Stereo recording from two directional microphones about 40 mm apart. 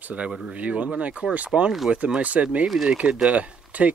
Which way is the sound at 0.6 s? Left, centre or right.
Right.